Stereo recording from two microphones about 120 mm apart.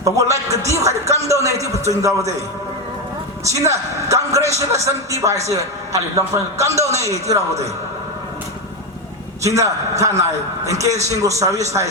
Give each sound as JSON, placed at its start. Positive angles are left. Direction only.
{"t": 0.0, "sound": "a man's voice", "side_deg": -25}
{"t": 3.4, "sound": "a man's voice", "side_deg": -25}
{"t": 9.4, "sound": "a man's voice", "side_deg": -25}